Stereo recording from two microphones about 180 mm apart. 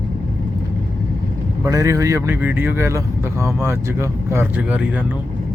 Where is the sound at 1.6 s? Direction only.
20° right (ahead or behind).